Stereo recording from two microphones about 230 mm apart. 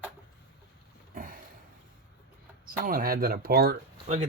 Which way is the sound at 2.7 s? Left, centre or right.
Right.